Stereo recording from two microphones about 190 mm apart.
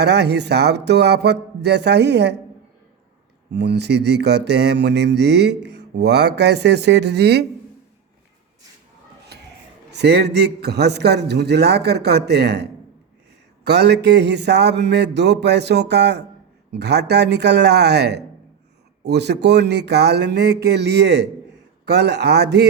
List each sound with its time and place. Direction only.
0.0 s mantra: 60° right (ahead or behind)
3.5 s mantra: 65° right (ahead or behind)
9.9 s mantra: 60° right (ahead or behind)
13.7 s mantra: 60° right (ahead or behind)